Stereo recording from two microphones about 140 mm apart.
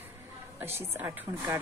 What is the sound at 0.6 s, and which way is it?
Speech, 15° right (ahead or behind).